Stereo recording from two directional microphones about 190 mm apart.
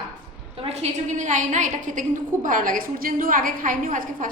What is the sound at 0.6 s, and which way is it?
A woman's voice, 35° right (ahead or behind).